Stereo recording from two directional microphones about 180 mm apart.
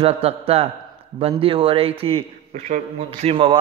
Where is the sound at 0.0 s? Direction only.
35° right (ahead or behind).